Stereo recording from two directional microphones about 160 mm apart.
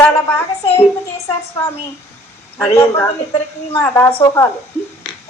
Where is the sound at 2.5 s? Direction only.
15° left (ahead or behind).